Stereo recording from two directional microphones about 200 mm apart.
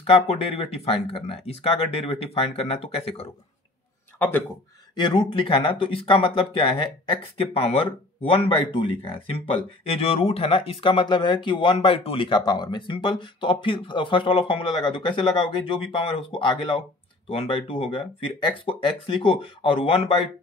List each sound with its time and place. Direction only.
0.0 s speech: 30° left (ahead or behind)
4.9 s speech: 25° left (ahead or behind)